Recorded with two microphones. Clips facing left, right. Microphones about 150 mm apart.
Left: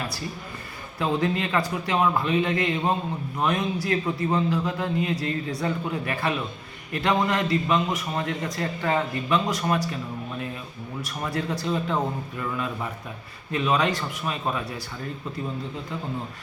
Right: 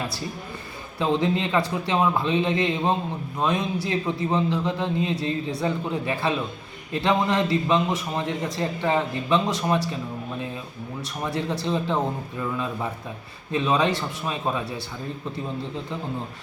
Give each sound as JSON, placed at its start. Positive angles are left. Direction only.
{"t": 0.9, "sound": "a man's voice", "side_deg": -25}
{"t": 11.3, "sound": "a man's voice", "side_deg": -25}